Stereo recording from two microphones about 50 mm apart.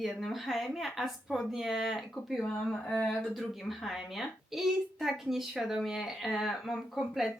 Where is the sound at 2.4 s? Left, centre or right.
Centre.